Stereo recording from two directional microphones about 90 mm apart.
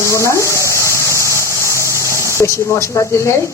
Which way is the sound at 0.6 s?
35° left (ahead or behind).